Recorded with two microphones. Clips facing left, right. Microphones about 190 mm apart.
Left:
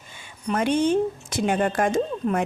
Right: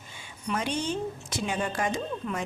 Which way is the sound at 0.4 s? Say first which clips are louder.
Left 9 dB; 55° left (ahead or behind).